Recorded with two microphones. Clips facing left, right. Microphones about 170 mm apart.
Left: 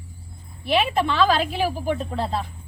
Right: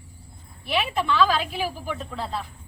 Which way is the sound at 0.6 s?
30° left (ahead or behind).